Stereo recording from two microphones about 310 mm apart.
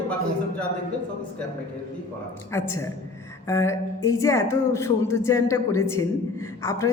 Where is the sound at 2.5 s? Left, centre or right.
Centre.